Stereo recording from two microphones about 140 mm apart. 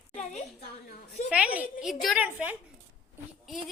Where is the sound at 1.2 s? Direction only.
10° right (ahead or behind).